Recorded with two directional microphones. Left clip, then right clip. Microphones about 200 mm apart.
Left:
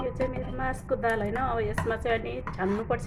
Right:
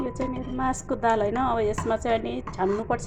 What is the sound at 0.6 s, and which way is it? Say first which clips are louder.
A woman's voice: right 3 dB; 20° right (ahead or behind).